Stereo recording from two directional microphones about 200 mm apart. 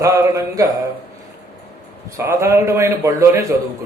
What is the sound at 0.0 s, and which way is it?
Speech, 15° right (ahead or behind).